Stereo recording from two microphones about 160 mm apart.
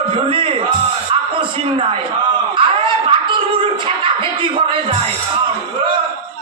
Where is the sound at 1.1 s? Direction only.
30° right (ahead or behind).